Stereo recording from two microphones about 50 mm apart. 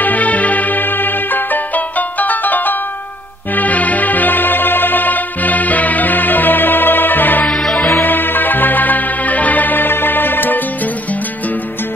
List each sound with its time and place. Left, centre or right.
0.0 s music: left
7.4 s music: centre
8.0 s music: left